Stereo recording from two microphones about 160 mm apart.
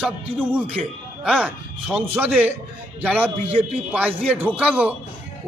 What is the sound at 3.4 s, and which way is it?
Speech, 35° right (ahead or behind).